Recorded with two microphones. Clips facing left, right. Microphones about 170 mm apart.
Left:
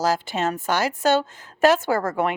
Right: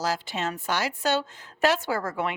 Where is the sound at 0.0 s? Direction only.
45° left (ahead or behind).